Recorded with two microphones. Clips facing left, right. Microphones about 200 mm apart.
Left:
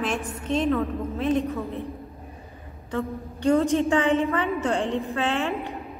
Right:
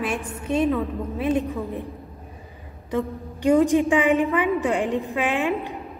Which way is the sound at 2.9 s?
15° right (ahead or behind).